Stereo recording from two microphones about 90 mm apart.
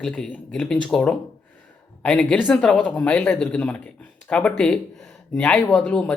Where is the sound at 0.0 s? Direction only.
5° left (ahead or behind).